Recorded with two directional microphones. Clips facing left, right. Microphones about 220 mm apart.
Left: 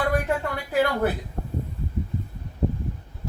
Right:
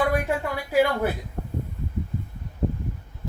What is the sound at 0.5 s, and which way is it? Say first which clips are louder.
Speech: right 4 dB; 10° right (ahead or behind).